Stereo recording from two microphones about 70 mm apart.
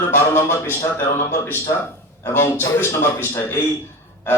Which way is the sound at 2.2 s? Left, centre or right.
Left.